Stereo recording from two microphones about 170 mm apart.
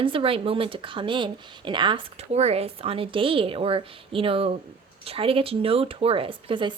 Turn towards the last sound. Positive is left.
turn(degrees=-30)  # may be behind; listen again after turning